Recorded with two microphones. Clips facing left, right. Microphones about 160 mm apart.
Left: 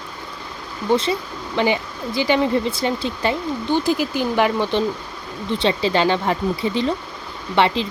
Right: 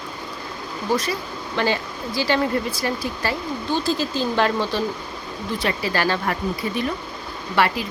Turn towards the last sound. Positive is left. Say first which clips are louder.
# left 3 dB
turn(degrees=25)  # may be behind; listen again after turning